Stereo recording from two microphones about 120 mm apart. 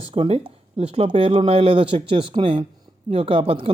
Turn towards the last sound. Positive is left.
turn(degrees=-50)  # may be behind; listen again after turning